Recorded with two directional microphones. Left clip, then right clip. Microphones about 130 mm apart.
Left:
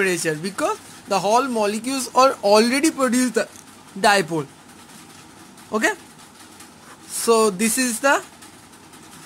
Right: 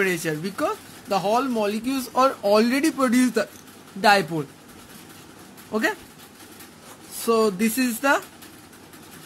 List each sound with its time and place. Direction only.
0.0 s speech: 25° left (ahead or behind)
4.0 s speech: 35° left (ahead or behind)
5.7 s speech: 35° left (ahead or behind)
7.2 s speech: 40° left (ahead or behind)